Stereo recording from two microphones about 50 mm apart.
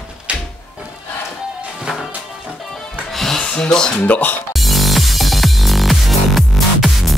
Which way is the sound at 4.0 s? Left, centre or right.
Left.